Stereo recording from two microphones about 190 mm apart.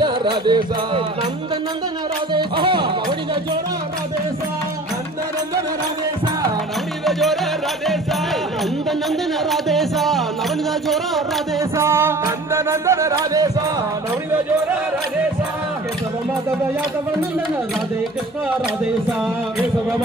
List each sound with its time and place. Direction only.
0.0 s music: 25° right (ahead or behind)
2.3 s music: 25° right (ahead or behind)
7.1 s music: centre (ahead or behind)
9.5 s music: centre (ahead or behind)
11.7 s music: 15° right (ahead or behind)